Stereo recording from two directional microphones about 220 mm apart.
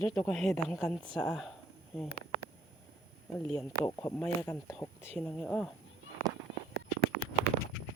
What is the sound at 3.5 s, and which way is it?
Speech, 15° left (ahead or behind).